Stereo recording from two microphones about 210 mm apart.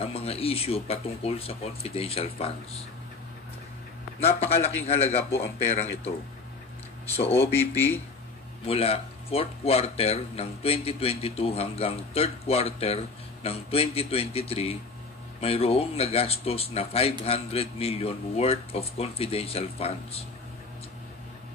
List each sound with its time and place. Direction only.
0.0 s speech: 30° left (ahead or behind)
4.2 s speech: 30° left (ahead or behind)
7.5 s speech: 10° left (ahead or behind)
8.6 s speech: 30° left (ahead or behind)